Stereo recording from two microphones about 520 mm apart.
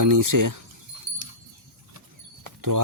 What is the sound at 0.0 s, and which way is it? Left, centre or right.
Speech, right.